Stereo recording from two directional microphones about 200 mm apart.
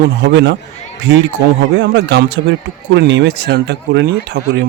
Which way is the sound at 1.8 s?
60° right (ahead or behind).